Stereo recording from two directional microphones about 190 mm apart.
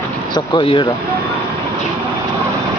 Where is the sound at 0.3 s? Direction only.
25° left (ahead or behind).